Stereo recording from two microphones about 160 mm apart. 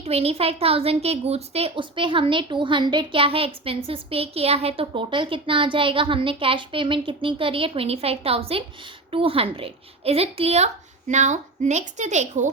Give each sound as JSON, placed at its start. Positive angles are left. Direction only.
{"t": 0.0, "sound": "a woman's voice", "side_deg": -40}